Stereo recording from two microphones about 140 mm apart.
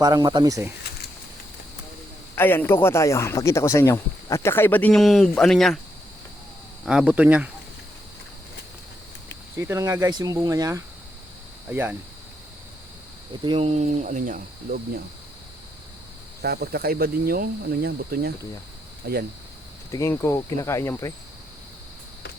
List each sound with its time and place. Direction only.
0.0 s speech: 30° right (ahead or behind)
2.3 s speech: 15° left (ahead or behind)
6.8 s speech: 10° right (ahead or behind)
9.6 s speech: 20° right (ahead or behind)
13.4 s speech: 40° right (ahead or behind); by 15.0 s 85° right
16.4 s speech: 90° right
19.9 s speech: 20° left (ahead or behind)